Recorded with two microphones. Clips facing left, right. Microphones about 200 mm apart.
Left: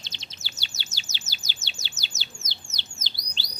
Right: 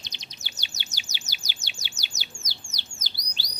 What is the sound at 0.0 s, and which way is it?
Chirp, 15° right (ahead or behind).